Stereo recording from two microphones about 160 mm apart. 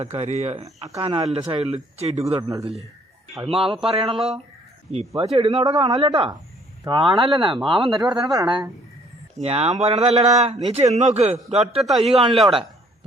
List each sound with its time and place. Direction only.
0.0 s speech: 40° right (ahead or behind)
3.4 s speech: 35° right (ahead or behind)
5.6 s speech: 25° right (ahead or behind)
9.4 s speech: 40° right (ahead or behind)
11.8 s a man's voice: centre (ahead or behind)
12.0 s speech: 40° right (ahead or behind)
12.3 s a man's voice: centre (ahead or behind)